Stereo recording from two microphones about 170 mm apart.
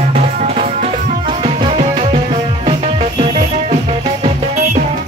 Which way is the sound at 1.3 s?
30° right (ahead or behind).